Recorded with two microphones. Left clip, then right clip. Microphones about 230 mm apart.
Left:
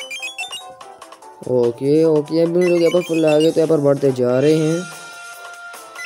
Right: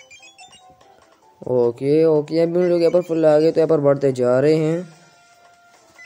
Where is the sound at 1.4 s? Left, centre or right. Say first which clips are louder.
Left 1 dB; centre.